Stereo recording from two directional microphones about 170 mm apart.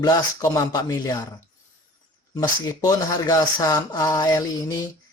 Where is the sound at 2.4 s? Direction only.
25° left (ahead or behind).